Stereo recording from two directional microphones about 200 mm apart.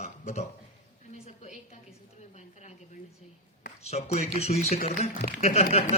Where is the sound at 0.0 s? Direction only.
35° left (ahead or behind).